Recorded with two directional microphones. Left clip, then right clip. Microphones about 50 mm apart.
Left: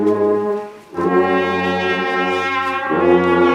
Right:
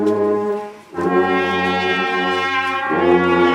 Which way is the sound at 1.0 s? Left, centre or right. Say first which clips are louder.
Left 1 dB; right.